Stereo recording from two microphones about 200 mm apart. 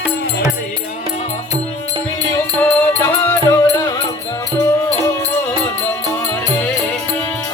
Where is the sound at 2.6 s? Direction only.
15° left (ahead or behind).